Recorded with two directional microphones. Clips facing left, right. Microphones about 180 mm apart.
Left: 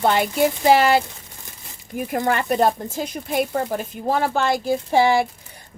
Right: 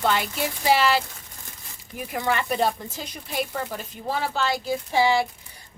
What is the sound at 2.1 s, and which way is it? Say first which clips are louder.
Speech: left 4 dB; 45° left (ahead or behind).